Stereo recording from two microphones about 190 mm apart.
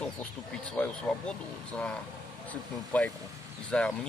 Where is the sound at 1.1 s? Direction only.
5° left (ahead or behind).